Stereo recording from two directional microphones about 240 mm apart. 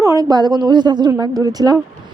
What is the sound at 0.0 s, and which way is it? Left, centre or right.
A woman's voice, centre.